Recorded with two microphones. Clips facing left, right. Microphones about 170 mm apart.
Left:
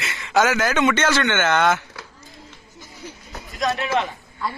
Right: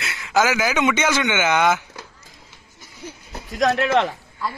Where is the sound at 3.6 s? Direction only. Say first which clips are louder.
Right 4 dB; 70° right (ahead or behind).